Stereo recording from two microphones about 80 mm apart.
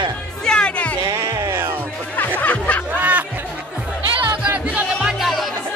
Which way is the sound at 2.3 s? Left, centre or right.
Centre.